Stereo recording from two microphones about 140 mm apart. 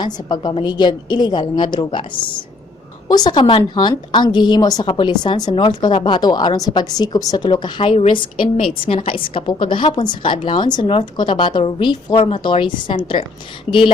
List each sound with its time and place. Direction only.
0.0 s a woman's voice: 30° left (ahead or behind)
3.1 s a woman's voice: 30° left (ahead or behind)